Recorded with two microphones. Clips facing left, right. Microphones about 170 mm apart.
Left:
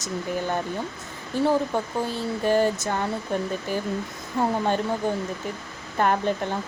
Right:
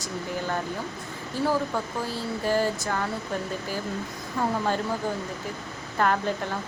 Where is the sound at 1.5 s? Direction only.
20° left (ahead or behind).